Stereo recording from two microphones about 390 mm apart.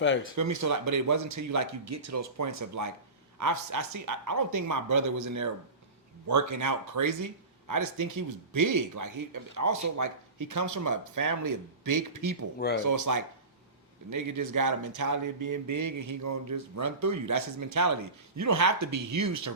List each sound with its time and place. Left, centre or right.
0.0 s speech: left
0.3 s speech: right
12.5 s speech: left
12.8 s speech: right